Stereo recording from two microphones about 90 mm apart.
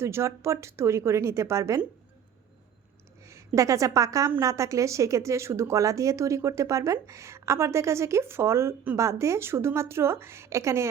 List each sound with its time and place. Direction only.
0.0 s speech: 30° right (ahead or behind)
3.2 s a woman's voice: 35° right (ahead or behind)